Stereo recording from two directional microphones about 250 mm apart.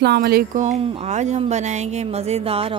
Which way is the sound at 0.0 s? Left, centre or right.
Right.